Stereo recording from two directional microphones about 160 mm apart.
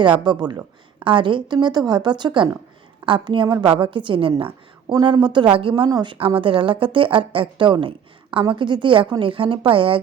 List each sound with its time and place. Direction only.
0.2 s a woman's voice: 25° right (ahead or behind)